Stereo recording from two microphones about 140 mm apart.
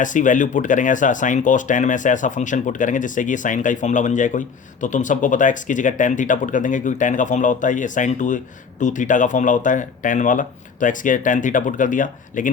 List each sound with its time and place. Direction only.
0.0 s speech: 65° left (ahead or behind)